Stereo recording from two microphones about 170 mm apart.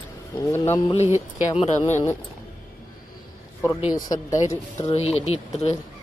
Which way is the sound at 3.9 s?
20° left (ahead or behind).